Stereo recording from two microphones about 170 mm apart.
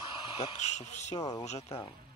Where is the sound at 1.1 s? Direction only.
20° left (ahead or behind).